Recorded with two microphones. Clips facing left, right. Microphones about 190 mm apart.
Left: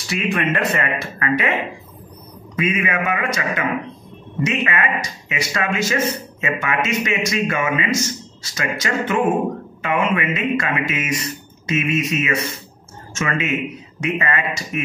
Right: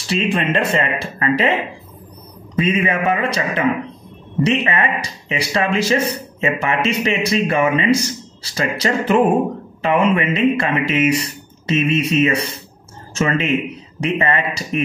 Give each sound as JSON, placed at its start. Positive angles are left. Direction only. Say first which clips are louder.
{"t": 0.1, "sound": "speech", "louder": "right 3 dB", "side_deg": -30}
{"t": 2.5, "sound": "a man's voice", "louder": "right 3 dB", "side_deg": -30}